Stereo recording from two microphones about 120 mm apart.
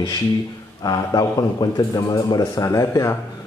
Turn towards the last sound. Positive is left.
turn(degrees=25)  # may be behind; listen again after turning